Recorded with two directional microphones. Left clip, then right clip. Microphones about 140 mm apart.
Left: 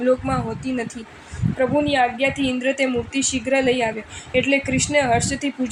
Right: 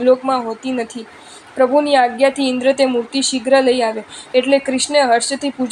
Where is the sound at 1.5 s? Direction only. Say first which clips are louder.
Right 6 dB; 35° right (ahead or behind).